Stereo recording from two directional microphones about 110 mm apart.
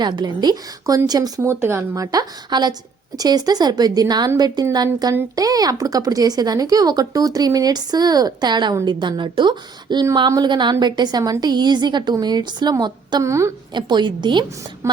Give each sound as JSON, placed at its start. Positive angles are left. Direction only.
{"t": 0.0, "sound": "a woman's voice", "side_deg": -45}
{"t": 13.2, "sound": "a woman's voice", "side_deg": -25}
{"t": 13.7, "sound": "a woman's voice", "side_deg": -45}